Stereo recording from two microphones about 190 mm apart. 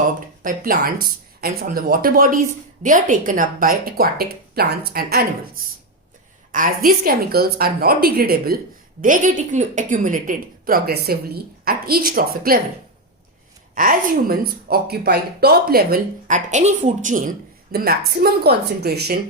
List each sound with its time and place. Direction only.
0.4 s speech: 50° right (ahead or behind)
6.5 s speech: 45° right (ahead or behind)
13.7 s speech: 45° right (ahead or behind)